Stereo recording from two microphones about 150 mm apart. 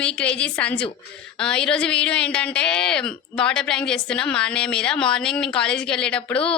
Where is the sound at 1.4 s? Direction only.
5° left (ahead or behind).